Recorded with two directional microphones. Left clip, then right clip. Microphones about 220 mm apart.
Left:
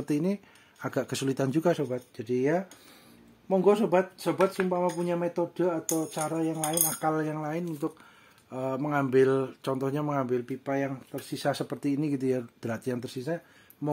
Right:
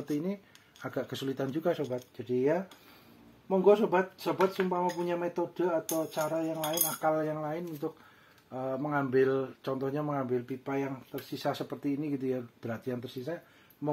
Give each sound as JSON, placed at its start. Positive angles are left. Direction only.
{"t": 0.1, "sound": "speech", "side_deg": 50}